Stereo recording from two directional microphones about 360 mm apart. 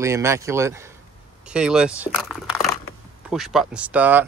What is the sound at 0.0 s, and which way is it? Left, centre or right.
Speech, centre.